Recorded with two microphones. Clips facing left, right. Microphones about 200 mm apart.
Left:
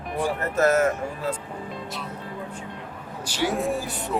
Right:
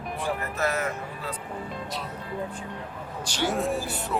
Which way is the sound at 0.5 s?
45° left (ahead or behind).